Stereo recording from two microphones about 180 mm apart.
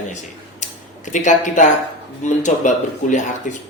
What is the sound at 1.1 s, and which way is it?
Speech, 45° left (ahead or behind).